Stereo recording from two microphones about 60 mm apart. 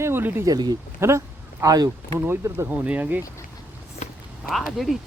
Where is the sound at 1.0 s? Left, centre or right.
Right.